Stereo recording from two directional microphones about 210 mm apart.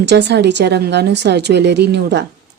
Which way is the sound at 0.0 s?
55° right (ahead or behind).